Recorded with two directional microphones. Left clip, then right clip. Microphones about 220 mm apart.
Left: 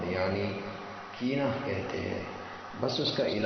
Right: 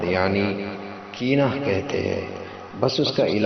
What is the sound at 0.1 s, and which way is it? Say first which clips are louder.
A man's voice: right 9 dB; 30° right (ahead or behind).